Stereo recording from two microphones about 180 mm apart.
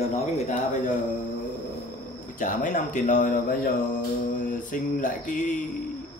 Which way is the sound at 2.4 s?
45° left (ahead or behind).